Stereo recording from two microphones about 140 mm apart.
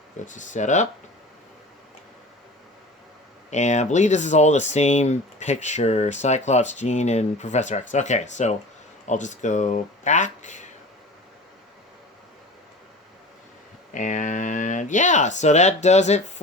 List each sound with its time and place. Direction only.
0.3 s speech: 65° left (ahead or behind)
3.5 s speech: 55° left (ahead or behind)
13.9 s speech: 60° left (ahead or behind)